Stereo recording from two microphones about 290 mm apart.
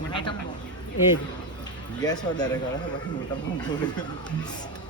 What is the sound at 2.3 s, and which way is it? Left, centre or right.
Speech, centre.